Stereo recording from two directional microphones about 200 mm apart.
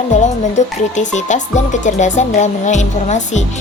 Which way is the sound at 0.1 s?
35° left (ahead or behind).